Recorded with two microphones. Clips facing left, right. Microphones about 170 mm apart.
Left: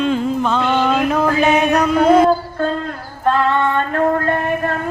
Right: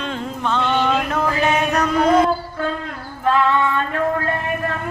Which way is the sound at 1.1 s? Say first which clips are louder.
Left 5 dB; 15° left (ahead or behind).